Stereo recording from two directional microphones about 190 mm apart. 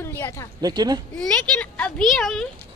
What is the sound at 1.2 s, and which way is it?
Speech, 5° left (ahead or behind).